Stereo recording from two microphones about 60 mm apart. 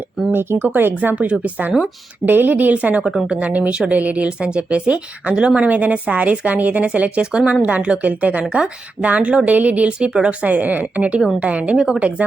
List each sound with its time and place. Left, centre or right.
0.3 s speech: right
3.0 s a woman's voice: centre
3.2 s speech: right
10.1 s speech: centre
10.4 s speech: right